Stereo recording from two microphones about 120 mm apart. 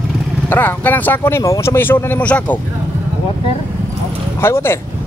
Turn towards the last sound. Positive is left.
turn(degrees=20)  # may be behind; listen again after turning